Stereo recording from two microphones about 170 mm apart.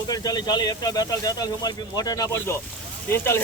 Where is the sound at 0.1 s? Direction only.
25° left (ahead or behind).